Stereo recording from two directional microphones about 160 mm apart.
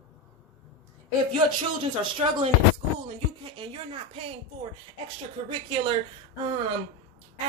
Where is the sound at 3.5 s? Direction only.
30° right (ahead or behind).